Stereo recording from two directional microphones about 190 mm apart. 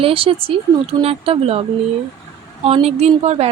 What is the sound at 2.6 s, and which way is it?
Speech, 30° right (ahead or behind).